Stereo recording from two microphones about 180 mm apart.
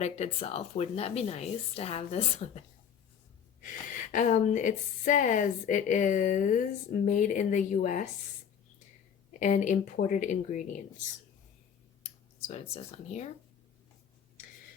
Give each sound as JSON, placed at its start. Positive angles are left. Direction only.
{"t": 0.0, "sound": "speech", "side_deg": 35}
{"t": 3.6, "sound": "a woman's voice", "side_deg": 45}
{"t": 9.4, "sound": "a woman's voice", "side_deg": 45}
{"t": 12.5, "sound": "speech", "side_deg": 35}